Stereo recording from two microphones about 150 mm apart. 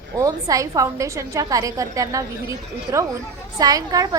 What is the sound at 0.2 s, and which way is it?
A woman's voice, 20° right (ahead or behind).